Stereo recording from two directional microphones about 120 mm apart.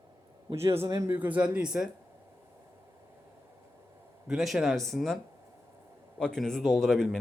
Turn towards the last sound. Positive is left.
turn(degrees=5)  # may be behind; listen again after turning